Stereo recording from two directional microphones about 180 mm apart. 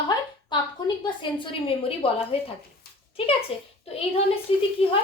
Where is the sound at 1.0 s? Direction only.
30° left (ahead or behind).